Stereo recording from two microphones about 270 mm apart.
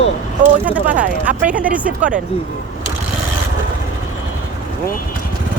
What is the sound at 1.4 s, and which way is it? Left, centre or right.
Speech, right.